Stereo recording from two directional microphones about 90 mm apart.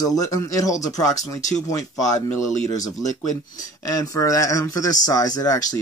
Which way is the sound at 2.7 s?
40° left (ahead or behind).